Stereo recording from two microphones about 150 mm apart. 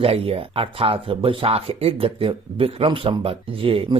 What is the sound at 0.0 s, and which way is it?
Speech, 40° right (ahead or behind).